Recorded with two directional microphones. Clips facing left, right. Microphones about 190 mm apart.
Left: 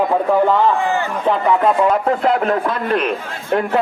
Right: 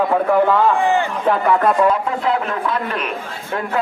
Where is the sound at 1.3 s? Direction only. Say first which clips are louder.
Left 1 dB; 15° left (ahead or behind).